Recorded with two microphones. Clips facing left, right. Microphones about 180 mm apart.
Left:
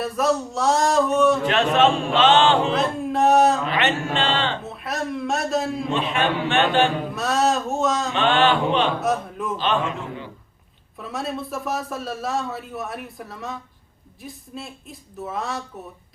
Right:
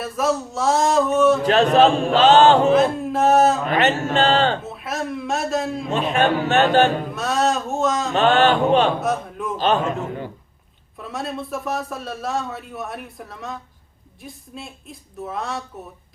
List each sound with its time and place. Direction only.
0.0 s a man's voice: centre (ahead or behind)
1.4 s chant: 40° right (ahead or behind)
2.7 s a sound: centre (ahead or behind)
3.7 s music: 40° right (ahead or behind)
4.6 s a sound: centre (ahead or behind)
5.9 s speech: 45° right (ahead or behind)
7.0 s music: centre (ahead or behind)
8.1 s speech: 40° right (ahead or behind)
9.0 s a man's voice: centre (ahead or behind)
9.6 s speech: 40° right (ahead or behind)
10.9 s a man's voice: centre (ahead or behind)